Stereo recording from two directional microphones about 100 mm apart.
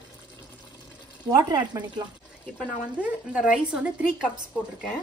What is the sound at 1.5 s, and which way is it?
Speech, 40° right (ahead or behind).